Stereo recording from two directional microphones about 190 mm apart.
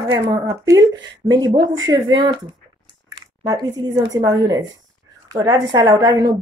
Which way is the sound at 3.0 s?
20° right (ahead or behind).